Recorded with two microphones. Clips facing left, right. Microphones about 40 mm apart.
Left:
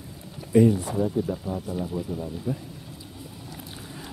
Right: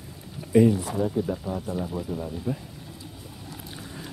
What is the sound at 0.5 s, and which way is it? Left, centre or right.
Speech, centre.